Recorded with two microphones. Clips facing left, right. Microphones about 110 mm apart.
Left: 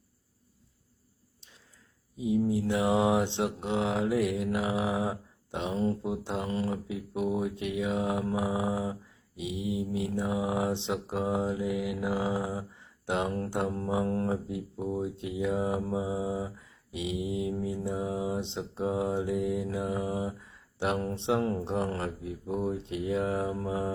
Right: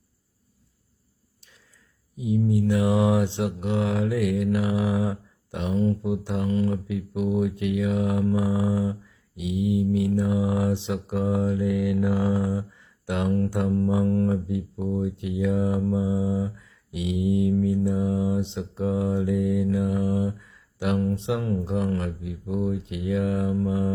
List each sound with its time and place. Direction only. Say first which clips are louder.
2.1 s mantra: right 3 dB; 25° left (ahead or behind)
11.9 s speech: right 6 dB; 15° left (ahead or behind)
13.5 s mantra: right 6 dB; 25° left (ahead or behind)
20.8 s speech: right 4 dB; 30° left (ahead or behind)